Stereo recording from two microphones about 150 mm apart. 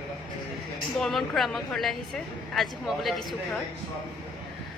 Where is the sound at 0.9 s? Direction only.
Centre (ahead or behind).